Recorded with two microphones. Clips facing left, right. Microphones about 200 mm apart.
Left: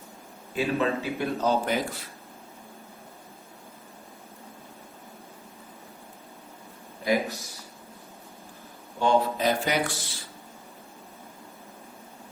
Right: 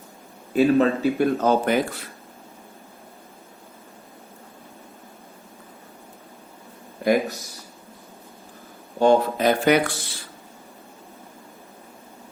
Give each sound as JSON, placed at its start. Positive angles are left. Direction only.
{"t": 0.5, "sound": "speech", "side_deg": -45}
{"t": 7.0, "sound": "speech", "side_deg": -50}
{"t": 9.0, "sound": "speech", "side_deg": -50}